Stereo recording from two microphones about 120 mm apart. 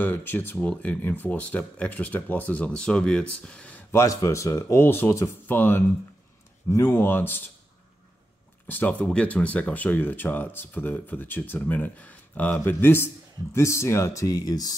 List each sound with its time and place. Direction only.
0.0 s speech: 15° left (ahead or behind)
3.9 s speech: 25° left (ahead or behind)
8.6 s speech: 15° left (ahead or behind); by 14.8 s 30° left (ahead or behind)